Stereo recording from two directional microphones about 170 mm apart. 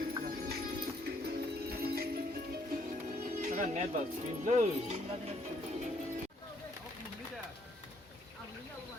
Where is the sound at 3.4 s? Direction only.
45° right (ahead or behind).